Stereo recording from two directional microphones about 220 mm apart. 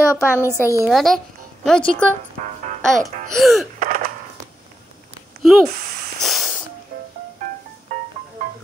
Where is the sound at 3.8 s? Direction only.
40° right (ahead or behind).